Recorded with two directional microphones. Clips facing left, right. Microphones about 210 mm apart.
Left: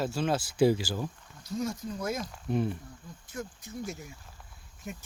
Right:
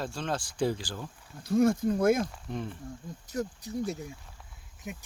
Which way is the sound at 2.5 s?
10° left (ahead or behind).